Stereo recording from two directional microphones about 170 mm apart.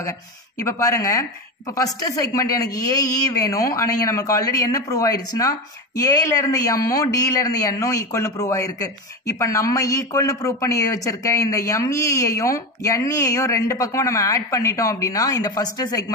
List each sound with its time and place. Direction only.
0.6 s speech: 20° left (ahead or behind)